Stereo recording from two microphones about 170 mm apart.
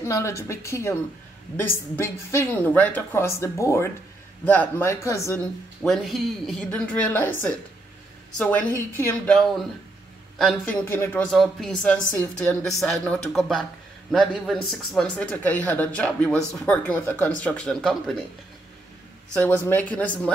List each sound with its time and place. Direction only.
0.0 s speech: 15° left (ahead or behind)
5.8 s a woman's voice: centre (ahead or behind)
8.4 s speech: 10° left (ahead or behind)
11.2 s a woman's voice: centre (ahead or behind)
12.6 s a woman's voice: centre (ahead or behind)
19.4 s speech: 10° left (ahead or behind)